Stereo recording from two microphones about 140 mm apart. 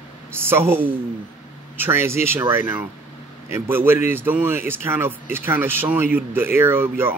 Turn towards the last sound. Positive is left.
turn(degrees=-15)  # may be behind; listen again after turning